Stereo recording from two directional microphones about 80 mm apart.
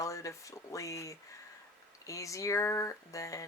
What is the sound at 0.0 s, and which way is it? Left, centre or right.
Speech, left.